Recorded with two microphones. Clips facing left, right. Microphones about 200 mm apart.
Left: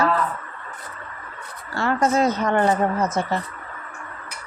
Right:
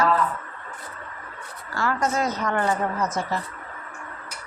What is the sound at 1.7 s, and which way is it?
A woman's voice, 25° left (ahead or behind).